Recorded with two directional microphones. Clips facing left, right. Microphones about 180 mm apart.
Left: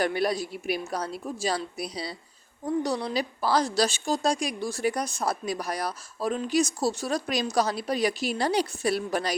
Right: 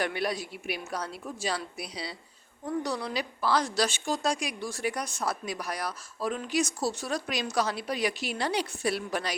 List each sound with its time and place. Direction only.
0.0 s a woman's voice: 40° left (ahead or behind)